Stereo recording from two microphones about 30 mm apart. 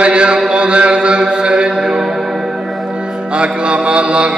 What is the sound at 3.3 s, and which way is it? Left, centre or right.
Music, right.